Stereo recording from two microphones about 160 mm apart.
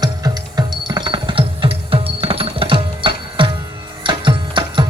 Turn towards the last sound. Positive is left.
turn(degrees=-30)  # may be behind; listen again after turning